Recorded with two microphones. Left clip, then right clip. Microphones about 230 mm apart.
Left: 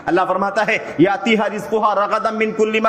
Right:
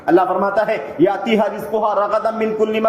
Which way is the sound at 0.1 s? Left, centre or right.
Left.